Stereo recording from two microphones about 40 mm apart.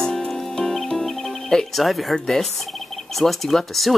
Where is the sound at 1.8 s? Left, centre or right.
Centre.